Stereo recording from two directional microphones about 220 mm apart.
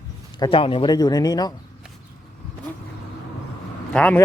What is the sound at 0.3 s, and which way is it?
Speech, 20° left (ahead or behind).